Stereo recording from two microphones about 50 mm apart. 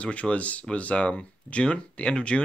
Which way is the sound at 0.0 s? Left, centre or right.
Left.